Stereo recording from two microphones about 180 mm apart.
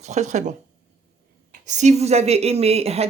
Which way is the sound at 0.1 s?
40° right (ahead or behind).